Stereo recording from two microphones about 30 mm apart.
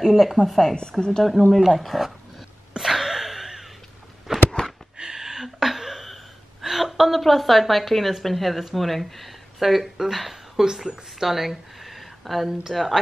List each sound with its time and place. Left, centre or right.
0.1 s a woman's voice: centre
0.7 s a woman's voice: left
1.7 s a woman's voice: centre
2.8 s a sound: centre
4.3 s a sound: centre
6.6 s a woman's voice: centre